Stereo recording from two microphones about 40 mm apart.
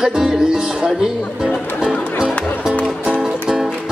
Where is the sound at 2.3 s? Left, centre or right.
Left.